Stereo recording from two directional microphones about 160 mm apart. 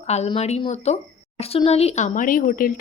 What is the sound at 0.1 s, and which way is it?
Speech, 40° left (ahead or behind).